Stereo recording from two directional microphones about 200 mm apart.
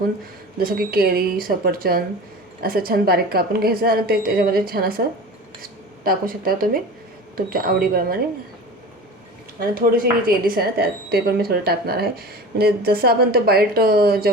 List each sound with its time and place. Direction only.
0.6 s a woman's voice: 50° right (ahead or behind)
6.1 s a woman's voice: 45° right (ahead or behind)
9.6 s a woman's voice: 45° right (ahead or behind)